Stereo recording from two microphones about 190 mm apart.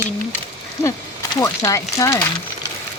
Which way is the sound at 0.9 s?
15° left (ahead or behind).